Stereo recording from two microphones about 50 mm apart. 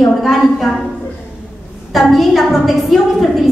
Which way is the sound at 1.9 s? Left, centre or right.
Centre.